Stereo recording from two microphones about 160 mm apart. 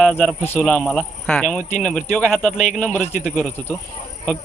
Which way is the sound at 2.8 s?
10° left (ahead or behind).